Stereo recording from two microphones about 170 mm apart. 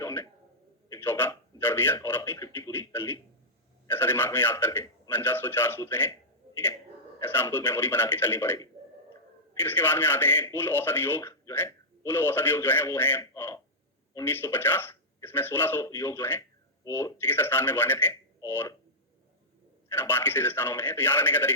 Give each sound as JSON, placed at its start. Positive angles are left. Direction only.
{"t": 0.0, "sound": "a sound", "side_deg": 15}
{"t": 0.9, "sound": "a man's voice", "side_deg": 15}
{"t": 7.2, "sound": "a man's voice", "side_deg": 15}
{"t": 19.9, "sound": "a man's voice", "side_deg": 15}